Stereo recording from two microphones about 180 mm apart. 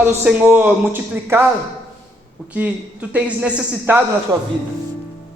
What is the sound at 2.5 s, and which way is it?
Speech, 10° right (ahead or behind).